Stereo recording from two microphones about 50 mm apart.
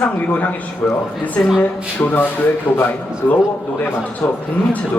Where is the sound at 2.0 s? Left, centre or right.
Left.